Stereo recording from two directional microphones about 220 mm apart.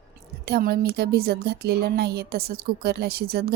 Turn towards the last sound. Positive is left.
turn(degrees=-45)  # may be behind; listen again after turning